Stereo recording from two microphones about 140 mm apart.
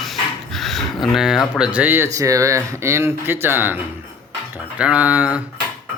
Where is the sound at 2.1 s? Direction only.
25° right (ahead or behind).